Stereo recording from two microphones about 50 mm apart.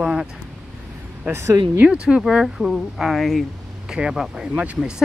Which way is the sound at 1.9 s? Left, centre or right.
Centre.